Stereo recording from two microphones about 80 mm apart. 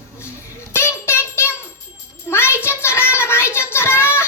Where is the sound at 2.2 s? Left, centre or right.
Left.